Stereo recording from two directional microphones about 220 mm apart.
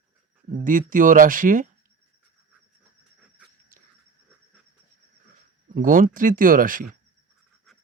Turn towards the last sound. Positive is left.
turn(degrees=-40)  # may be behind; listen again after turning